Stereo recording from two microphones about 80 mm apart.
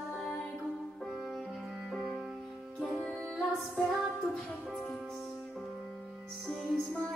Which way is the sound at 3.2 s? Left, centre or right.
Centre.